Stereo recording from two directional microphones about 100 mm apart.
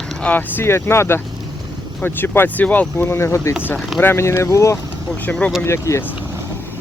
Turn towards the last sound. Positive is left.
turn(degrees=30)  # may be behind; listen again after turning